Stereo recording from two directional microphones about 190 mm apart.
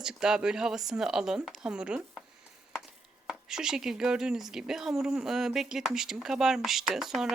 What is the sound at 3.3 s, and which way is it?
Speech, 5° right (ahead or behind).